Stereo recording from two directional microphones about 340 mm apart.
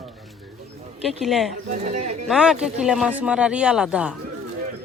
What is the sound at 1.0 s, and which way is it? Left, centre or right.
Speech, centre.